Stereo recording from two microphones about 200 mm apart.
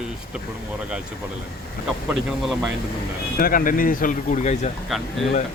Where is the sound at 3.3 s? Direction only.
45° left (ahead or behind).